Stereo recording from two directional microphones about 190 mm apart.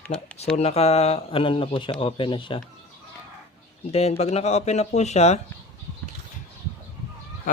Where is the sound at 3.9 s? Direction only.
35° left (ahead or behind).